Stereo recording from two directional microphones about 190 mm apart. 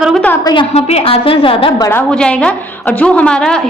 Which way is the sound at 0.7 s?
35° left (ahead or behind).